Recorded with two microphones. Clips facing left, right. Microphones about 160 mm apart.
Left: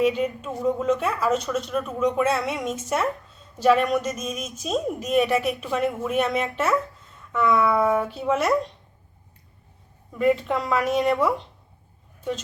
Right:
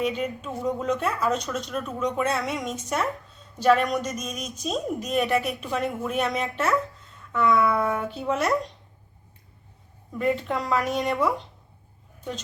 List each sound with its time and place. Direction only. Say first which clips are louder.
0.0 s speech: left 5 dB; 5° left (ahead or behind)
10.2 s speech: left 4 dB; centre (ahead or behind)